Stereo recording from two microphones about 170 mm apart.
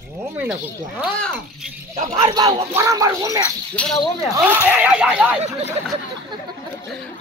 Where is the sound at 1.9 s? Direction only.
50° right (ahead or behind).